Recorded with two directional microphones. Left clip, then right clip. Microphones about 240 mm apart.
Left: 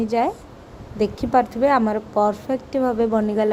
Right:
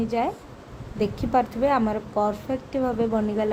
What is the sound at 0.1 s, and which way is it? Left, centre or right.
A woman's voice, left.